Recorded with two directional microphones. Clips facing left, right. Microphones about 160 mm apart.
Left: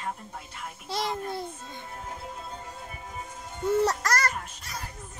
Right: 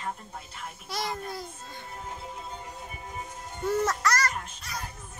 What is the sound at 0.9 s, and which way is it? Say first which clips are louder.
Speech: left 3 dB; 25° left (ahead or behind).